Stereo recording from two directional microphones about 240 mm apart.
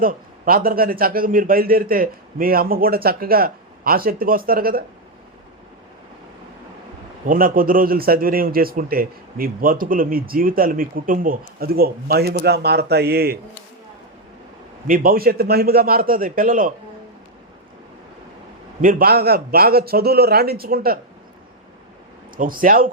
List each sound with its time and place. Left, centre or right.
0.0 s a man's voice: right
7.3 s a man's voice: right
14.8 s a man's voice: right
18.8 s a man's voice: right
22.4 s a man's voice: right